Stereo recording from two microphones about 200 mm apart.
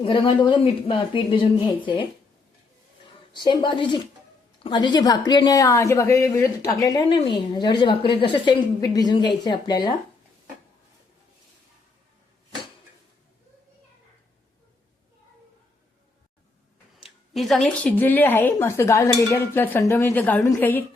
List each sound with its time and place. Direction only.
0.0 s a woman's voice: 25° left (ahead or behind)
3.3 s a woman's voice: 25° left (ahead or behind)
17.0 s speech: centre (ahead or behind)